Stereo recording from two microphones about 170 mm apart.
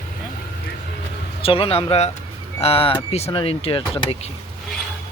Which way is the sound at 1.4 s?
35° left (ahead or behind).